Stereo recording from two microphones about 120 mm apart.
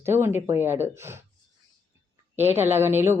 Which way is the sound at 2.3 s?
20° right (ahead or behind).